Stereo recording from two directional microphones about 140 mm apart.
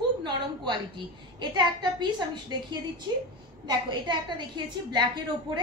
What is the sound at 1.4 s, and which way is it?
Speech, 30° right (ahead or behind).